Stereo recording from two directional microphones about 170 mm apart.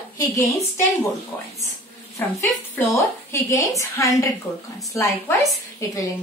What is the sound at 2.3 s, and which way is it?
A woman's voice, 15° left (ahead or behind).